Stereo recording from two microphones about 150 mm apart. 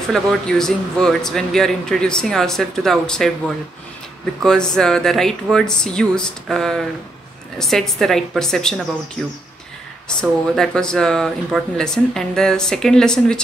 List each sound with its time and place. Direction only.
0.1 s a man's voice: 5° left (ahead or behind)
10.2 s a man's voice: centre (ahead or behind)